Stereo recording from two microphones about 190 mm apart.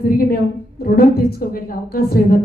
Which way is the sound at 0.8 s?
50° left (ahead or behind).